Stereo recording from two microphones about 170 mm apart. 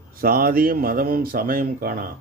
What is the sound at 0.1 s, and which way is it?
Speech, 60° right (ahead or behind).